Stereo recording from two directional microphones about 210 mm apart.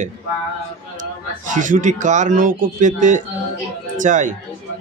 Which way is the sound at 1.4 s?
40° right (ahead or behind).